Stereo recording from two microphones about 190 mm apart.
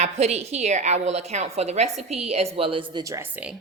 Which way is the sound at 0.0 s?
35° right (ahead or behind).